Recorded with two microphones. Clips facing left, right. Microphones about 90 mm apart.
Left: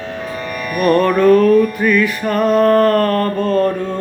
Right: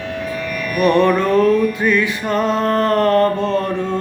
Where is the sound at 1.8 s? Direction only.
20° right (ahead or behind).